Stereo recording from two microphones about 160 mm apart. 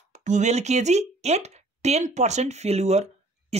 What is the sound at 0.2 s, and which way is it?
Speech, 50° right (ahead or behind).